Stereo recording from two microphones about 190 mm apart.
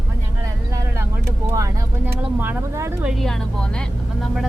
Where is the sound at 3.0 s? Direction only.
Centre (ahead or behind).